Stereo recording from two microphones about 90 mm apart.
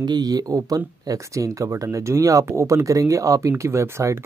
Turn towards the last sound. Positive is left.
turn(degrees=-30)  # may be behind; listen again after turning